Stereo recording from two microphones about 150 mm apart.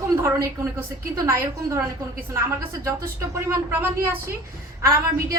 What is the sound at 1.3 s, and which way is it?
Speech, 20° right (ahead or behind).